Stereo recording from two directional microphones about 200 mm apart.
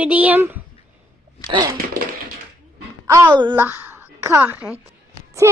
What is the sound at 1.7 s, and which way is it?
Tap, 50° right (ahead or behind).